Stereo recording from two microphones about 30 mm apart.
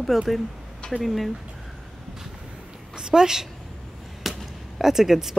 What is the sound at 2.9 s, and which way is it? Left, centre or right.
Speech, right.